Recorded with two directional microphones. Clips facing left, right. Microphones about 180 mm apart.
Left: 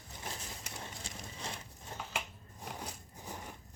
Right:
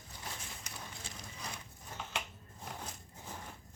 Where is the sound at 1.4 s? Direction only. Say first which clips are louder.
Left 2 dB; 30° left (ahead or behind).